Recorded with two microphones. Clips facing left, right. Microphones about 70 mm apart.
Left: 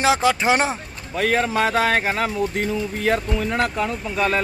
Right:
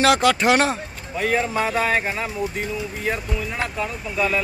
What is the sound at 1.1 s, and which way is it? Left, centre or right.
Speech, left.